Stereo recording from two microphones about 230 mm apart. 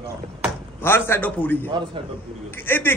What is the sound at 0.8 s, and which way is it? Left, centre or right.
A man's voice, centre.